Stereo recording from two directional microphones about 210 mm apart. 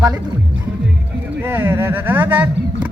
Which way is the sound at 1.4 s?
10° right (ahead or behind).